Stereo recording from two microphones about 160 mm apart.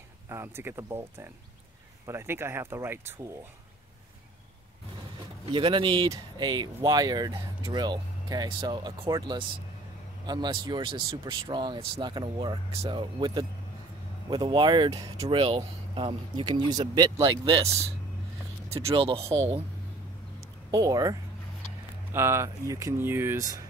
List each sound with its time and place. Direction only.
0.3 s speech: 15° right (ahead or behind)
5.4 s speech: 30° right (ahead or behind)
15.4 s speech: 35° right (ahead or behind)
18.9 s speech: 35° right (ahead or behind)
20.7 s speech: 25° right (ahead or behind)